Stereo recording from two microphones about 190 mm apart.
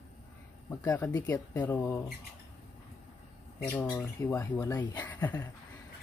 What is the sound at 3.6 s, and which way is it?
Speech, 15° left (ahead or behind).